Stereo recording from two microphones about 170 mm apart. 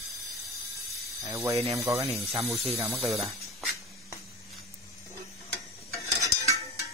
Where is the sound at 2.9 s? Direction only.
Centre (ahead or behind).